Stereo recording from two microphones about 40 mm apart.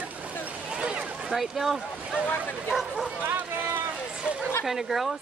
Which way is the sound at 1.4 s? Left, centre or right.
Centre.